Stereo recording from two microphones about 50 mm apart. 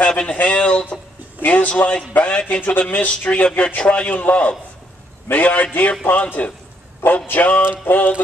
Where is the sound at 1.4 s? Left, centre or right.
Left.